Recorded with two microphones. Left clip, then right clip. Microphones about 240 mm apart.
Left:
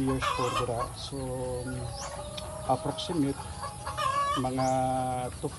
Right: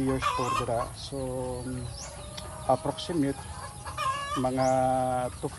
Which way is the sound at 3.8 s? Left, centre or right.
Centre.